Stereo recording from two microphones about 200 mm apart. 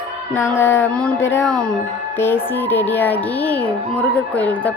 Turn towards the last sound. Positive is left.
turn(degrees=5)  # may be behind; listen again after turning